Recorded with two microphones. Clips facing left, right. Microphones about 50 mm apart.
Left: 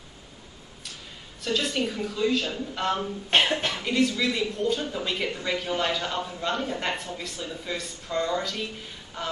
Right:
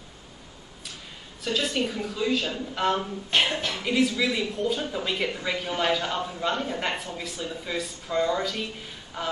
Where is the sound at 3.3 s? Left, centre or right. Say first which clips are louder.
Left 2 dB; left.